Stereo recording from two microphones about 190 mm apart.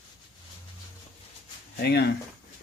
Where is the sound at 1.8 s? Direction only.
60° left (ahead or behind).